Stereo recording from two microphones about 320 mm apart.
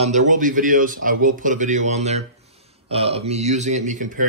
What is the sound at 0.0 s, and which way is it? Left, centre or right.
A man's voice, right.